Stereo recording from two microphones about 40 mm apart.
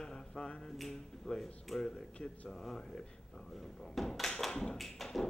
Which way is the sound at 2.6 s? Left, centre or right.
Centre.